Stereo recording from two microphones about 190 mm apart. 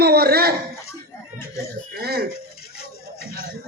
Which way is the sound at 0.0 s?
55° right (ahead or behind).